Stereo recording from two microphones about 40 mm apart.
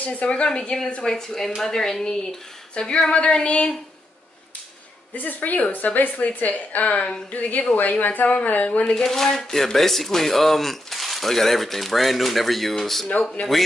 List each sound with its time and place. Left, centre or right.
0.0 s a woman's voice: left; by 2.0 s centre
2.7 s a sound: left
3.1 s a woman's voice: left
5.1 s a woman's voice: left
7.0 s a woman's voice: left
7.3 s a woman's voice: left
8.8 s speech: centre